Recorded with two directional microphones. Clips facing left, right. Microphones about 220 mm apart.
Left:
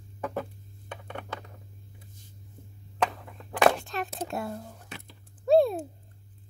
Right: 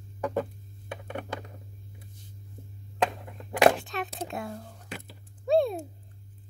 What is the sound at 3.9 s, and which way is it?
Speech, centre (ahead or behind).